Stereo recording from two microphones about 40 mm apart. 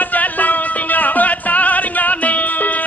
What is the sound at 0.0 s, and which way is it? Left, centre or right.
Music, left.